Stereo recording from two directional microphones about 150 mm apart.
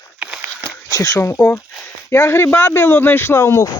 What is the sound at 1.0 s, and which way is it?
A man's voice, 20° left (ahead or behind).